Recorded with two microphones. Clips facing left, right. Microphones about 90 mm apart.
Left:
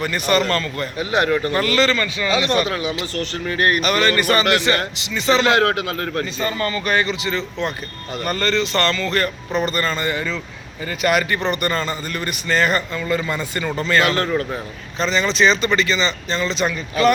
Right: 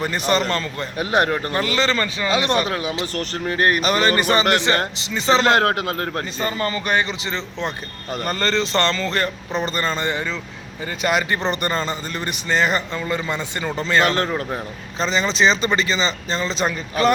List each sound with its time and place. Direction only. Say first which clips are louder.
0.0 s a man's voice: left 1 dB; 30° right (ahead or behind)
0.9 s a man's voice: even; 45° right (ahead or behind)
1.5 s speech: left 2 dB; 15° right (ahead or behind)
1.9 s a man's voice: left 1 dB; 30° right (ahead or behind)
2.6 s a man's voice: left 1 dB; 40° right (ahead or behind)